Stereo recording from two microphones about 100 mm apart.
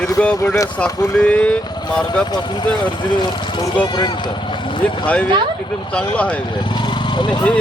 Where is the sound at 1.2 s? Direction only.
15° left (ahead or behind).